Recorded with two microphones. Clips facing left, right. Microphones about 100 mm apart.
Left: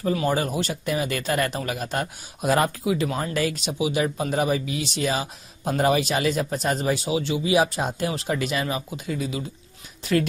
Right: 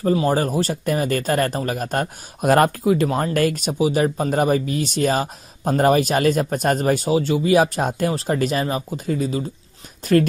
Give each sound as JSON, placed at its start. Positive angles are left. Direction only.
{"t": 0.0, "sound": "speech", "side_deg": -35}